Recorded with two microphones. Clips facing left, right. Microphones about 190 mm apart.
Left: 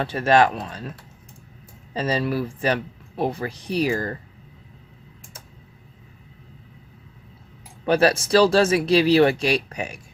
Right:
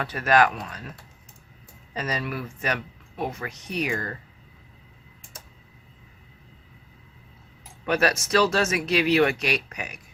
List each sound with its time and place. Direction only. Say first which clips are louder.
0.0 s speech: left 3 dB; 30° left (ahead or behind)
1.9 s speech: left 6 dB; 30° left (ahead or behind)
7.9 s speech: left 5 dB; 30° left (ahead or behind)